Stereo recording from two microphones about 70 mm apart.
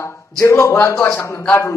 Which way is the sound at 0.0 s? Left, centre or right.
Left.